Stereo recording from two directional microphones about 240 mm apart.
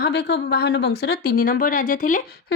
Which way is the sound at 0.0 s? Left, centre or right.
Left.